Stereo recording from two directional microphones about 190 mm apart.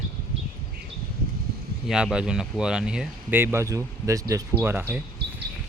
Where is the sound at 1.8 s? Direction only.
5° right (ahead or behind).